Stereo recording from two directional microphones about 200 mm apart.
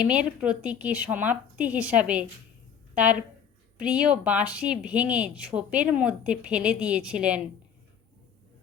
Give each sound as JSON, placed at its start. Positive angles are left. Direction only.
{"t": 0.0, "sound": "a woman's voice", "side_deg": -5}